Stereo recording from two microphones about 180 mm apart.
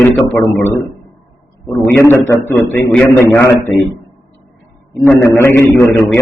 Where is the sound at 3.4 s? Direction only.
15° left (ahead or behind).